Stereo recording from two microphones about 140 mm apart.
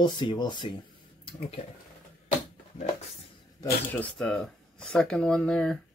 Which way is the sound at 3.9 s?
10° left (ahead or behind).